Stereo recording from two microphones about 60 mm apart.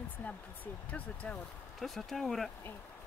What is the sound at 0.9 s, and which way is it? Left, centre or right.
Speech, left.